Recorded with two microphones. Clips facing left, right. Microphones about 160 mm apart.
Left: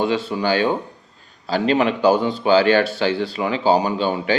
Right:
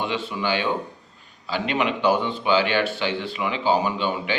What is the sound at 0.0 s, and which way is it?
A man's voice, 35° left (ahead or behind).